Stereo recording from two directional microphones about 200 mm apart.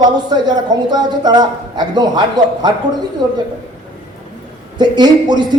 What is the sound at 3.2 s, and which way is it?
Speech, 20° right (ahead or behind).